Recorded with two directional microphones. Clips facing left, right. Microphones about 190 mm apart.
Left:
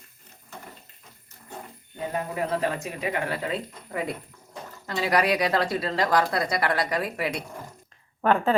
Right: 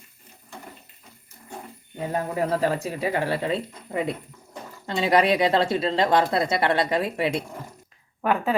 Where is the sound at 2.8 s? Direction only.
30° right (ahead or behind).